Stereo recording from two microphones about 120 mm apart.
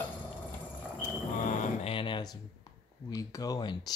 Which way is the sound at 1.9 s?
45° left (ahead or behind).